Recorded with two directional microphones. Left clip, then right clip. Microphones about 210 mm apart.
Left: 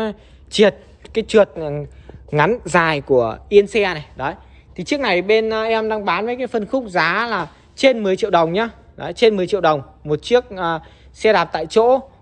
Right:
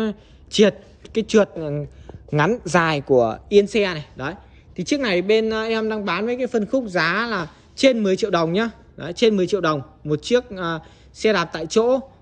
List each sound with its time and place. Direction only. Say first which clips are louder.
0.0 s a woman's voice: left 2 dB; 15° right (ahead or behind)